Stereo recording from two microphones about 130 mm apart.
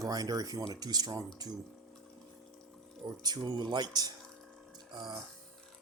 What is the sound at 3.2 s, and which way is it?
Speech, 35° right (ahead or behind).